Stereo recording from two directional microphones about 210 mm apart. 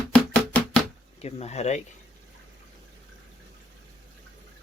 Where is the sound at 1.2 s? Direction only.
30° left (ahead or behind).